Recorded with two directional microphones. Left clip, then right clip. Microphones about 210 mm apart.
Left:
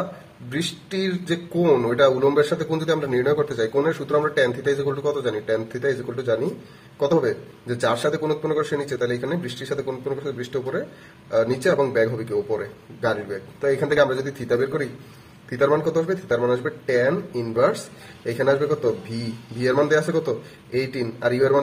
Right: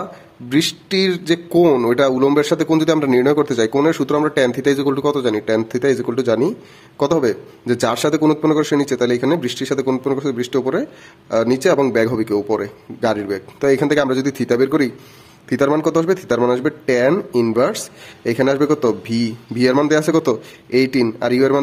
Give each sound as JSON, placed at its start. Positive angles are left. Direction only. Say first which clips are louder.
{"t": 0.5, "sound": "speech", "louder": "right 10 dB", "side_deg": -50}